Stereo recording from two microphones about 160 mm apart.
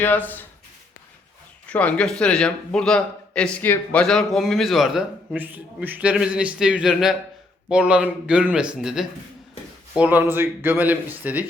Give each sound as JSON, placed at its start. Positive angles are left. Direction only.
{"t": 0.0, "sound": "speech", "side_deg": 10}
{"t": 1.6, "sound": "a man's voice", "side_deg": 10}